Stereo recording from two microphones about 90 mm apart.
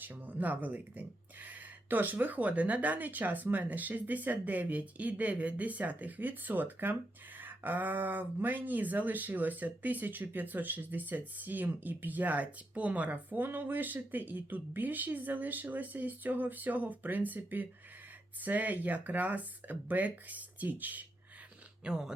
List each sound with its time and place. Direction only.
0.0 s speech: 20° right (ahead or behind)
21.8 s speech: 5° right (ahead or behind)